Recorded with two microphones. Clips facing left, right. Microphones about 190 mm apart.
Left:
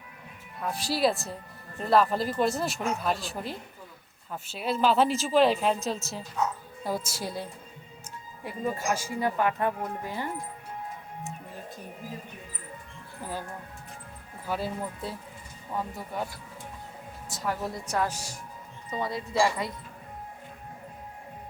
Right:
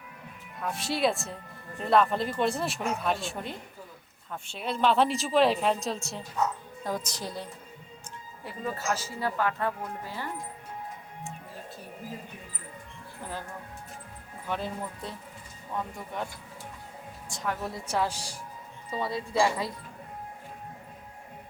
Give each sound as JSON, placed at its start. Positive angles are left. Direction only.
{"t": 0.6, "sound": "speech", "side_deg": 0}
{"t": 8.4, "sound": "speech", "side_deg": 15}
{"t": 14.4, "sound": "speech", "side_deg": 5}
{"t": 18.1, "sound": "speech", "side_deg": -35}
{"t": 18.9, "sound": "speech", "side_deg": 0}
{"t": 19.4, "sound": "speech", "side_deg": -25}